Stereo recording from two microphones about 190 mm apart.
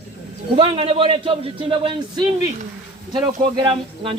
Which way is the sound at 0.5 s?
30° right (ahead or behind).